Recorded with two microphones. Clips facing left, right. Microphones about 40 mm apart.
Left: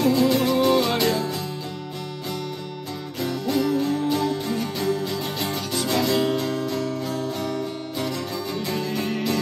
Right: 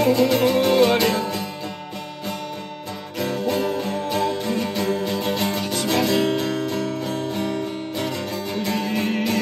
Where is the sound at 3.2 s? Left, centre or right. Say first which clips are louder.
Right 1 dB; right.